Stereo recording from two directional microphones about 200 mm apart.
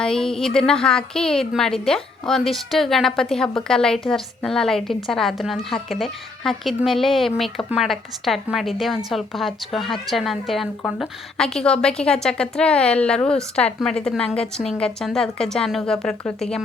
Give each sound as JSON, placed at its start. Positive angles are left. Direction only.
{"t": 0.0, "sound": "a woman's voice", "side_deg": 5}